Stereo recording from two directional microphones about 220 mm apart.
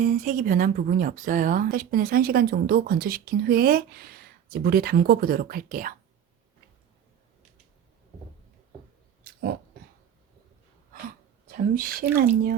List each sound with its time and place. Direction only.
0.0 s speech: 35° right (ahead or behind)
9.2 s dog: 45° right (ahead or behind)
11.4 s speech: 40° right (ahead or behind)